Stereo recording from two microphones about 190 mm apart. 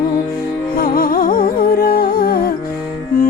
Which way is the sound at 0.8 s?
50° left (ahead or behind).